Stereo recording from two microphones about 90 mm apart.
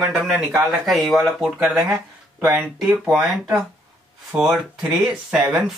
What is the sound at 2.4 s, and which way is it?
Speech, 20° right (ahead or behind).